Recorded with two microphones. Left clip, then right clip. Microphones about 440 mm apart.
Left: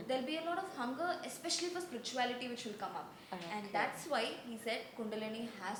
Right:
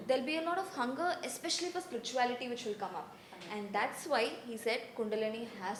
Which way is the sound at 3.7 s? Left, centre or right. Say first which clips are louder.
Right 3 dB; right.